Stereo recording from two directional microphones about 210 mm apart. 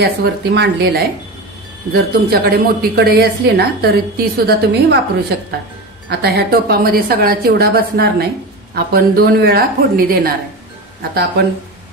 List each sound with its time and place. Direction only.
0.0 s a woman's voice: 50° right (ahead or behind)
6.0 s a woman's voice: 50° right (ahead or behind)